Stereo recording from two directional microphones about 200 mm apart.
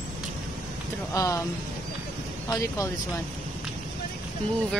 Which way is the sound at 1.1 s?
15° left (ahead or behind).